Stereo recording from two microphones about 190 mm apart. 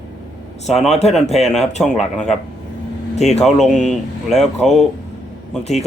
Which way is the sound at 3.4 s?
Centre (ahead or behind).